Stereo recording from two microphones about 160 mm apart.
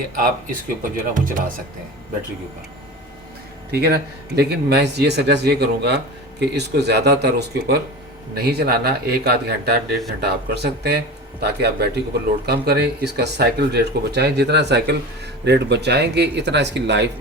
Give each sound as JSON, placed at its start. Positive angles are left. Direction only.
{"t": 0.8, "sound": "speech", "side_deg": -55}
{"t": 3.7, "sound": "a man's voice", "side_deg": -80}